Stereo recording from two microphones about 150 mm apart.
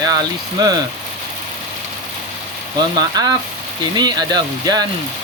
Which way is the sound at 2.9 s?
25° right (ahead or behind).